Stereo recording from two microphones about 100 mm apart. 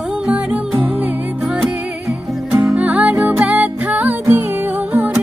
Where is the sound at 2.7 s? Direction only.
10° right (ahead or behind).